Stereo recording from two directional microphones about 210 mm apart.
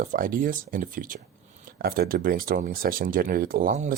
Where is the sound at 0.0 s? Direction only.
40° right (ahead or behind).